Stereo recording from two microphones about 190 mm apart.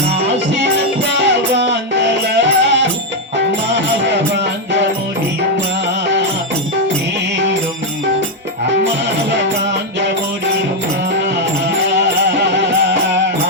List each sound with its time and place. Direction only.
0.3 s music: 65° right (ahead or behind)
12.4 s music: 70° right (ahead or behind)